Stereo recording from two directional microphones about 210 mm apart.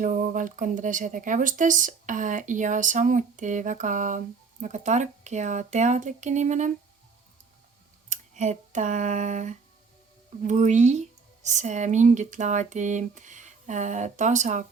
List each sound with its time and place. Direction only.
0.0 s speech: 40° right (ahead or behind)
8.1 s speech: 35° right (ahead or behind)